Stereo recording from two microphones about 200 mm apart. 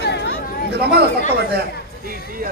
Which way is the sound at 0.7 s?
55° right (ahead or behind).